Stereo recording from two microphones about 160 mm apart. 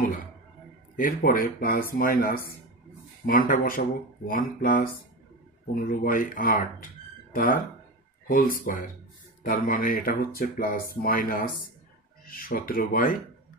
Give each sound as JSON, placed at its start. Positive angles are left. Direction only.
{"t": 0.9, "sound": "speech", "side_deg": 60}
{"t": 5.9, "sound": "speech", "side_deg": 60}